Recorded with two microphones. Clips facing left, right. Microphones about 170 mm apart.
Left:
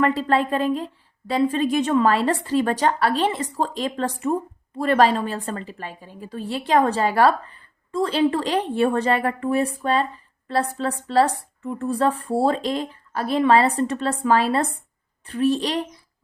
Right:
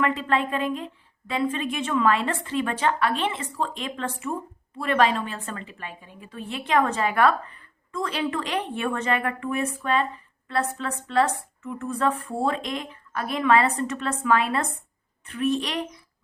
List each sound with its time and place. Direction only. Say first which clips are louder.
0.0 s a woman's voice: left 4 dB; 35° left (ahead or behind)